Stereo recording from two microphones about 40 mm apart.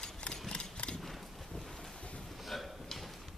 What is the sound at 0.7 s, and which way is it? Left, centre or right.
Mechanisms, left.